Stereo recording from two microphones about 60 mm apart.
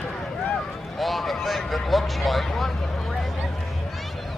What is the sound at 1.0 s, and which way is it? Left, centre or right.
Speech, centre.